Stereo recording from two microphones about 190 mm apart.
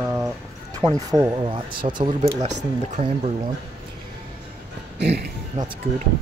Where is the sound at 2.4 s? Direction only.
35° right (ahead or behind).